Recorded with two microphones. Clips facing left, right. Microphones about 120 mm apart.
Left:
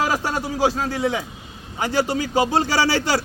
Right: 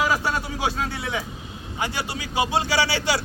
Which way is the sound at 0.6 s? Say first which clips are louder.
Left 10 dB; 35° left (ahead or behind).